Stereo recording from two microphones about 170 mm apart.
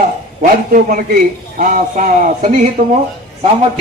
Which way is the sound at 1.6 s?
55° right (ahead or behind).